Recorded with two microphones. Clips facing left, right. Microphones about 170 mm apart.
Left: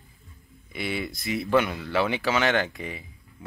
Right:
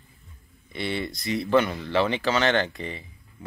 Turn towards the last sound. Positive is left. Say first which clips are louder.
# right 1 dB
turn(degrees=10)  # may be behind; listen again after turning